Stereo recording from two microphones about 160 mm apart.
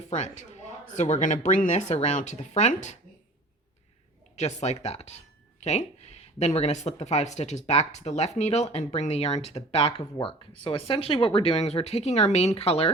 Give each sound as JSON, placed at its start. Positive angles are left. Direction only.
{"t": 0.0, "sound": "speech", "side_deg": 45}
{"t": 4.4, "sound": "speech", "side_deg": 45}